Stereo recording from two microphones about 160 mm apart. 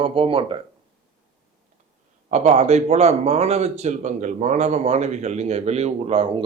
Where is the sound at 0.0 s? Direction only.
35° right (ahead or behind).